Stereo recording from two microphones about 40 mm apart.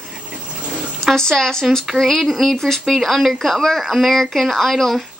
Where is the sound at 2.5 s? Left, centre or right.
Centre.